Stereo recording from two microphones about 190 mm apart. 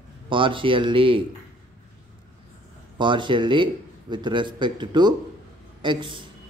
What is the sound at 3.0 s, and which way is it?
Speech, 25° right (ahead or behind).